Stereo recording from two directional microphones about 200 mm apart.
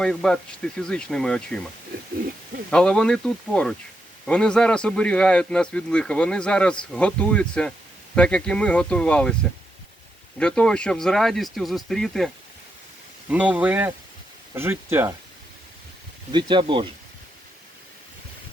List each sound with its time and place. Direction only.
0.0 s speech: 5° left (ahead or behind)
2.6 s speech: 5° left (ahead or behind)
13.3 s speech: 5° right (ahead or behind)
16.3 s speech: 25° right (ahead or behind)